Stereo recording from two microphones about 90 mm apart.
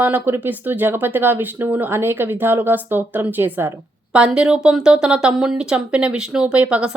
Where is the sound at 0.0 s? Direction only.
20° right (ahead or behind).